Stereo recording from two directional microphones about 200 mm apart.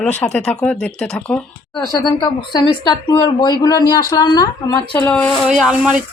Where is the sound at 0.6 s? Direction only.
5° left (ahead or behind).